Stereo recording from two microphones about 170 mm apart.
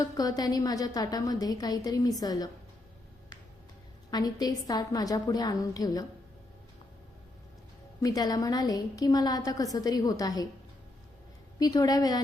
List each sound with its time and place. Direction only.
0.0 s a woman's voice: 20° left (ahead or behind)
4.1 s a woman's voice: 25° left (ahead or behind)
8.0 s a woman's voice: 20° left (ahead or behind)
11.6 s a woman's voice: 20° left (ahead or behind)